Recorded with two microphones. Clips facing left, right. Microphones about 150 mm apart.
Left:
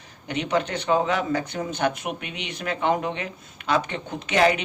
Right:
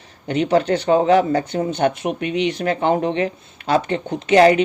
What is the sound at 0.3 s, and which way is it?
Speech, 30° right (ahead or behind).